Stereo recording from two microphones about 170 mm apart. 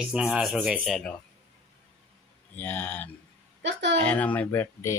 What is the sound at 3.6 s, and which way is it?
Speech, 90° right.